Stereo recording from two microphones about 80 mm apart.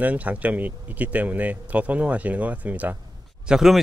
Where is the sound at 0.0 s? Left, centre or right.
Centre.